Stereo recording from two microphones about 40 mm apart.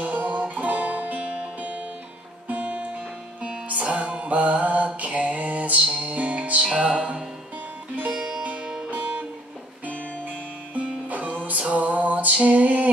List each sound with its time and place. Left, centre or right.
0.0 s music: right
3.9 s music: right
6.6 s music: right
8.9 s music: right